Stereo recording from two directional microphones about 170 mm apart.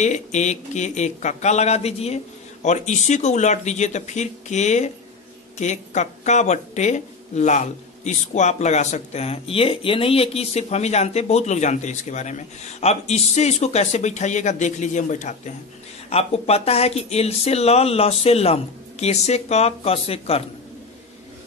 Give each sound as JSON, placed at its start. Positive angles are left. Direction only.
{"t": 0.0, "sound": "speech", "side_deg": 45}